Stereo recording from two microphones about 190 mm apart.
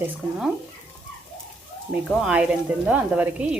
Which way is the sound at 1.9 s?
5° right (ahead or behind).